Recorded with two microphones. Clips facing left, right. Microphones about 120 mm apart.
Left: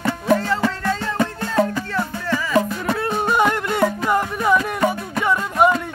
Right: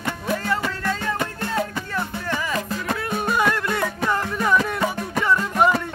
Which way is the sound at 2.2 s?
20° right (ahead or behind).